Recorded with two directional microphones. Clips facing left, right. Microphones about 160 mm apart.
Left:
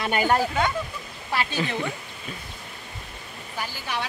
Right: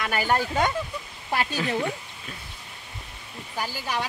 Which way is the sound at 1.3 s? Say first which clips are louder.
Right 1 dB; 45° right (ahead or behind).